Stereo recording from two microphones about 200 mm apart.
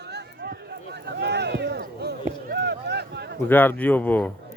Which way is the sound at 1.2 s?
55° right (ahead or behind).